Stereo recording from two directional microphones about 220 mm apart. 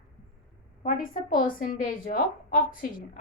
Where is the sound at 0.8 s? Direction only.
35° left (ahead or behind).